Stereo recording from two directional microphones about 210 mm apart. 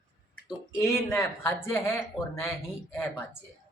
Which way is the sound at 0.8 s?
15° left (ahead or behind).